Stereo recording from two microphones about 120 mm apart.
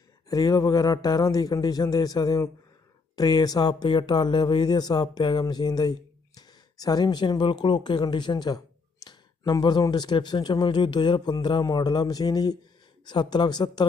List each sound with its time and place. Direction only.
0.3 s speech: 30° left (ahead or behind)